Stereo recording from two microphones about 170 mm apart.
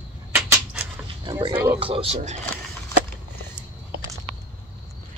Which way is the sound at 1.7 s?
30° right (ahead or behind).